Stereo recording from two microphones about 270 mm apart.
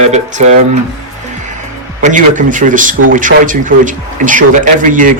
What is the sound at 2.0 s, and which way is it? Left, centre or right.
Speech, right.